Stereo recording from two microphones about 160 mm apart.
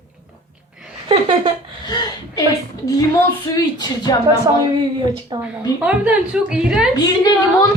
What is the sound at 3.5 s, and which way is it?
Speech, 25° left (ahead or behind).